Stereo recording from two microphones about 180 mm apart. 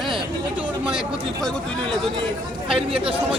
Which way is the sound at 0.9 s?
Centre (ahead or behind).